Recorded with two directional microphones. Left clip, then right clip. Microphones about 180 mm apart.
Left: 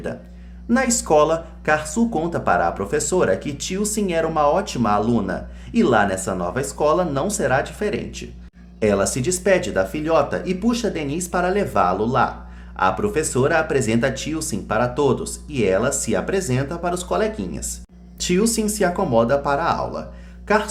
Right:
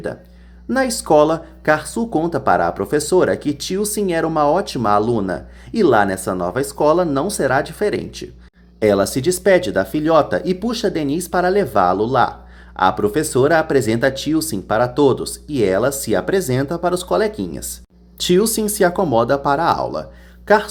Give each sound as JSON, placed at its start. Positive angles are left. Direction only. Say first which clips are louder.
{"t": 0.7, "sound": "speech", "louder": "right 2 dB", "side_deg": -30}